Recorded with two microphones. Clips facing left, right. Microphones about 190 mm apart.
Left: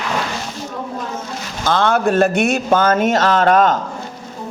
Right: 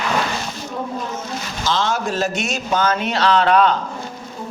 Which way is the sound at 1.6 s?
55° left (ahead or behind).